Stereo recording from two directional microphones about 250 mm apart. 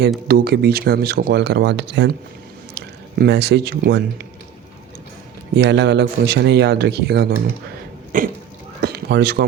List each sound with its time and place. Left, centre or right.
0.3 s speech: right
5.5 s speech: right
8.8 s a sound: right